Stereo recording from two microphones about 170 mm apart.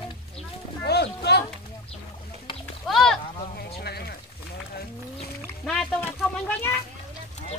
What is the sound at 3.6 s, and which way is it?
Speech, 70° left (ahead or behind).